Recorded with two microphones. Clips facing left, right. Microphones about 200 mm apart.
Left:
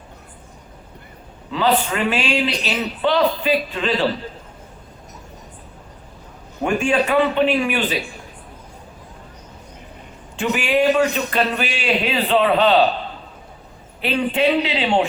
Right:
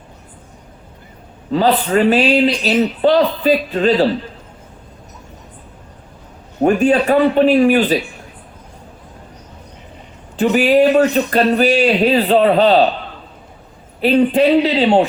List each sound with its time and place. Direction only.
1.5 s a man's voice: 40° right (ahead or behind)
6.6 s a man's voice: 40° right (ahead or behind)
10.3 s a man's voice: 40° right (ahead or behind)
14.0 s a man's voice: 35° right (ahead or behind)